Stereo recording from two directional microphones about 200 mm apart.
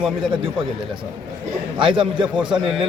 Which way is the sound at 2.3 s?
5° right (ahead or behind).